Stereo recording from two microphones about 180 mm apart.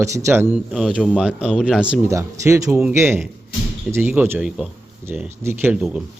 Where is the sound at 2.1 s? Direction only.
15° right (ahead or behind).